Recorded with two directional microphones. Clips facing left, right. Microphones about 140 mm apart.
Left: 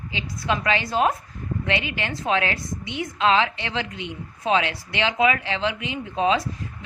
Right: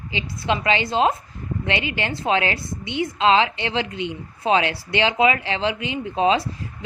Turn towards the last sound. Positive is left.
turn(degrees=-30)  # may be behind; listen again after turning